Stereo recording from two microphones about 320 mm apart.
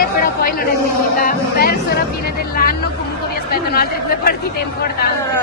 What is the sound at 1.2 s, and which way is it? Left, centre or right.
Music, left.